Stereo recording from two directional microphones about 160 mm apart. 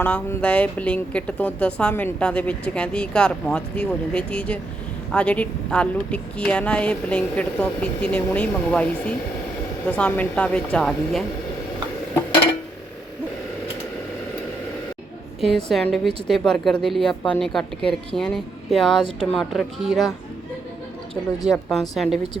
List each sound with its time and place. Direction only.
0.0 s speech: 10° left (ahead or behind)
15.4 s a woman's voice: centre (ahead or behind)
21.4 s a woman's voice: centre (ahead or behind)